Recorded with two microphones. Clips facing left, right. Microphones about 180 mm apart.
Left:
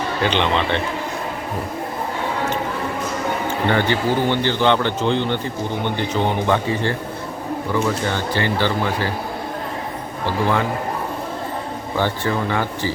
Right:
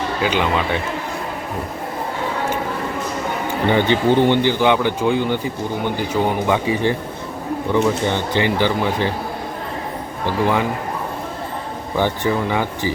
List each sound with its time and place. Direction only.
0.2 s speech: 5° right (ahead or behind)
3.7 s speech: 20° right (ahead or behind)
11.9 s speech: 15° right (ahead or behind)